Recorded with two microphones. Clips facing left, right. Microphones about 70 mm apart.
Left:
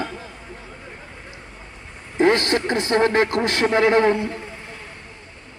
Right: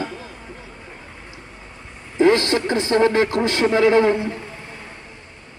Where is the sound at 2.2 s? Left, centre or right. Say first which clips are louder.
Right 2 dB; left.